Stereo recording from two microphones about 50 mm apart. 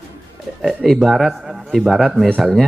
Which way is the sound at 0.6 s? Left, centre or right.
Centre.